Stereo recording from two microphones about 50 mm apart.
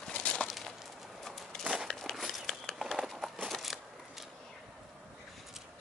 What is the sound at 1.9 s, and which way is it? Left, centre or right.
Crumpling, centre.